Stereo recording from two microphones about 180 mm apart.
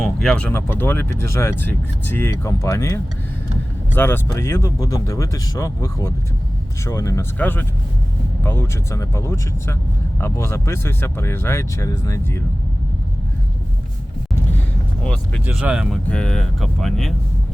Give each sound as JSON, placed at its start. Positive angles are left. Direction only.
{"t": 0.2, "sound": "speech", "side_deg": 5}
{"t": 15.0, "sound": "speech", "side_deg": 5}
{"t": 15.4, "sound": "speech", "side_deg": -5}